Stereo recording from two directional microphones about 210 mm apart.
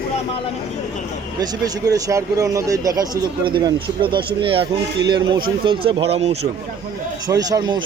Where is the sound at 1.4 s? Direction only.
15° right (ahead or behind).